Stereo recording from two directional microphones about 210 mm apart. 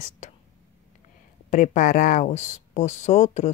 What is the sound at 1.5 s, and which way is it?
Speech, 35° left (ahead or behind).